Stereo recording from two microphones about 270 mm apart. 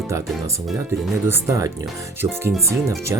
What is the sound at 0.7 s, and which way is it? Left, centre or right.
Speech, centre.